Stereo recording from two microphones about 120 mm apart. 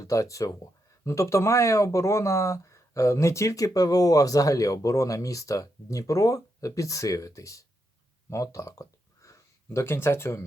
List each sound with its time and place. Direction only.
0.0 s speech: 25° left (ahead or behind)